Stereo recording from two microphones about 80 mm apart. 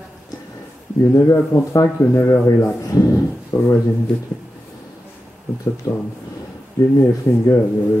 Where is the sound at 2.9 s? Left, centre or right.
Left.